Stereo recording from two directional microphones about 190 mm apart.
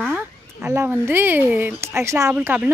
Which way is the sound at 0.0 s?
10° right (ahead or behind).